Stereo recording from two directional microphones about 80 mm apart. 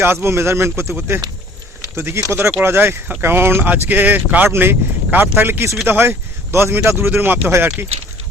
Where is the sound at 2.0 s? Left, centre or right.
Right.